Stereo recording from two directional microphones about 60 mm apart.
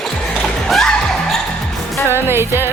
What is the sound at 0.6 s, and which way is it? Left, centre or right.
Music, centre.